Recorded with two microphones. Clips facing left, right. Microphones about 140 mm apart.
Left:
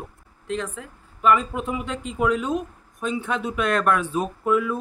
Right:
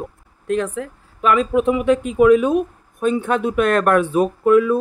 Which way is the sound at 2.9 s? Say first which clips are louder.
Right 8 dB; 55° right (ahead or behind).